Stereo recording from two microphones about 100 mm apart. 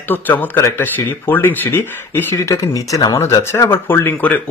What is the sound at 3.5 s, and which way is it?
Speech, 25° left (ahead or behind).